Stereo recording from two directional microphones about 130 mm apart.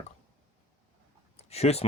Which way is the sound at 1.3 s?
55° left (ahead or behind).